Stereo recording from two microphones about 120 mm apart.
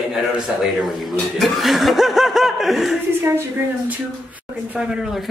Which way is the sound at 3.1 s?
20° right (ahead or behind).